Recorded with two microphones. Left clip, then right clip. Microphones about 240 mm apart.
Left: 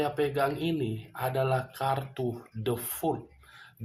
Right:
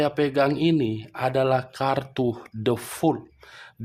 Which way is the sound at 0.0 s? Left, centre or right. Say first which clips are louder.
Right 6 dB; right.